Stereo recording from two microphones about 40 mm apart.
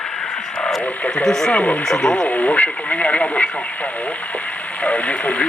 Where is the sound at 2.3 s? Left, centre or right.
Left.